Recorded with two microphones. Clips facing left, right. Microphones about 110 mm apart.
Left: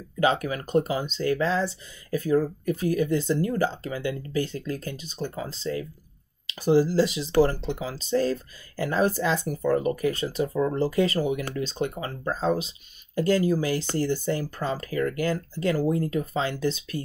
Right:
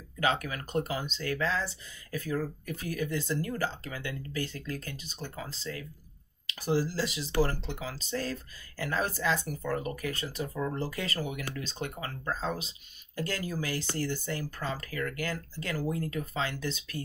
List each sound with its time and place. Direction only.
0.2 s speech: 25° left (ahead or behind)